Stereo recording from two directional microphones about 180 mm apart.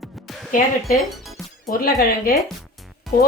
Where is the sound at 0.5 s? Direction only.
50° left (ahead or behind).